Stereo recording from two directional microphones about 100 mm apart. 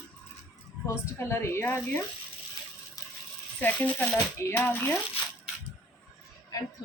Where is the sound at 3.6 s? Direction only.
15° left (ahead or behind).